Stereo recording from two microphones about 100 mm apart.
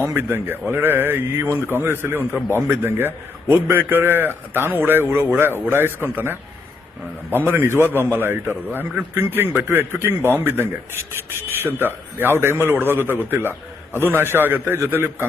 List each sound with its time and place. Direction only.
0.1 s a man's voice: 20° right (ahead or behind)
7.4 s a man's voice: 20° right (ahead or behind)